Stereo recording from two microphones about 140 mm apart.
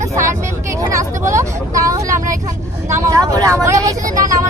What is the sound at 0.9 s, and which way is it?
Speech, 20° right (ahead or behind).